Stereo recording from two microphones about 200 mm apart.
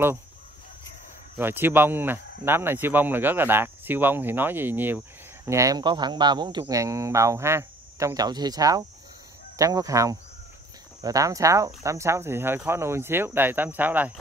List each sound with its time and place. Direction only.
1.4 s speech: 10° right (ahead or behind)